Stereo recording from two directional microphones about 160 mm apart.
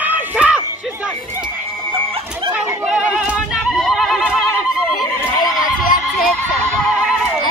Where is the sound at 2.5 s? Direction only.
5° right (ahead or behind).